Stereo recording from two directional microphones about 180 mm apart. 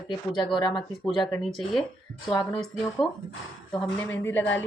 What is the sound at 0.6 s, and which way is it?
Speech, 25° left (ahead or behind).